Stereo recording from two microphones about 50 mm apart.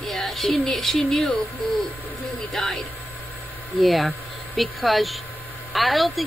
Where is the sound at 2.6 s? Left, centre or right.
Centre.